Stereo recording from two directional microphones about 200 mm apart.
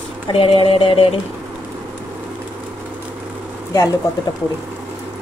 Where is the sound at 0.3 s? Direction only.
25° left (ahead or behind).